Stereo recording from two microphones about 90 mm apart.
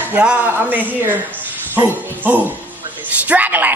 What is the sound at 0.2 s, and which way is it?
A woman's voice, 10° right (ahead or behind).